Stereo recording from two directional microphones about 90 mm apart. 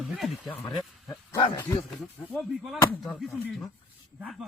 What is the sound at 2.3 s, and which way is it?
Speech, centre (ahead or behind).